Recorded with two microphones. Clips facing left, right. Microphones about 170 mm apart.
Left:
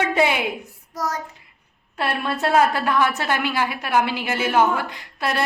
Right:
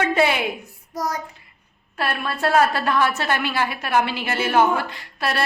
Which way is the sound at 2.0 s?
20° left (ahead or behind).